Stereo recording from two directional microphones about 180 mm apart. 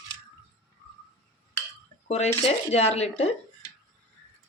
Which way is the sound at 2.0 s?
40° left (ahead or behind).